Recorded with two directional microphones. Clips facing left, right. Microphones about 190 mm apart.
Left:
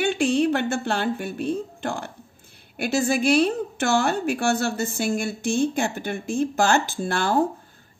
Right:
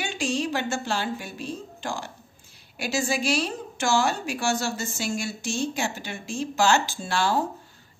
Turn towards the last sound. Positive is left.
turn(degrees=55)  # may be behind; listen again after turning